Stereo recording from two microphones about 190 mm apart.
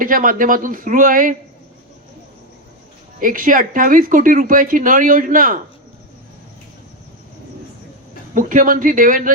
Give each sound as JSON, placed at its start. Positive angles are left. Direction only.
{"t": 0.0, "sound": "speech", "side_deg": -45}
{"t": 3.2, "sound": "speech", "side_deg": -45}
{"t": 8.4, "sound": "speech", "side_deg": -45}